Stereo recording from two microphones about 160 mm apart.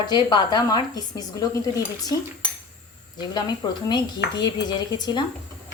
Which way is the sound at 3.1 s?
25° left (ahead or behind).